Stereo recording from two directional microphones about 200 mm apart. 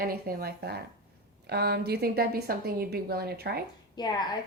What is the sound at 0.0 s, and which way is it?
A woman's voice, 50° right (ahead or behind).